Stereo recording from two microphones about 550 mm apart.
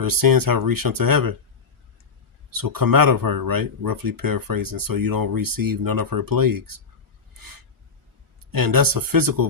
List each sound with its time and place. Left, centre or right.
0.0 s speech: right
2.5 s speech: right
8.5 s speech: right